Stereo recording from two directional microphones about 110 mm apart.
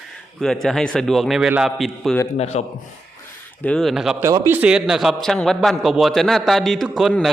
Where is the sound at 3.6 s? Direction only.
5° left (ahead or behind).